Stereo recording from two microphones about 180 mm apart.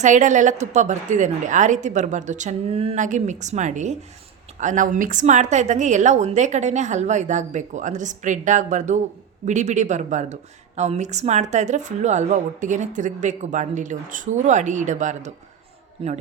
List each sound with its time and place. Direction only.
0.0 s a woman's voice: 45° right (ahead or behind)
16.0 s a woman's voice: 30° right (ahead or behind)